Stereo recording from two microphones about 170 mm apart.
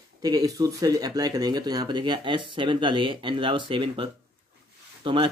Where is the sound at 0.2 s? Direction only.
20° right (ahead or behind).